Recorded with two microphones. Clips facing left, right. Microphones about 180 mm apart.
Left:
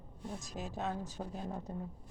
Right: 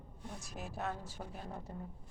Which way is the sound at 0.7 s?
15° left (ahead or behind).